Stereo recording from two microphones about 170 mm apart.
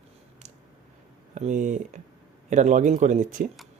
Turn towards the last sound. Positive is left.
turn(degrees=-45)  # may be behind; listen again after turning